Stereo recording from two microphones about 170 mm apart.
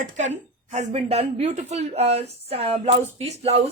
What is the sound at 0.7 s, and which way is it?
Speech, 40° right (ahead or behind).